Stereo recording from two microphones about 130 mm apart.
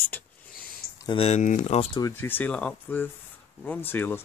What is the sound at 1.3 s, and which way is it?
Speech, 65° left (ahead or behind).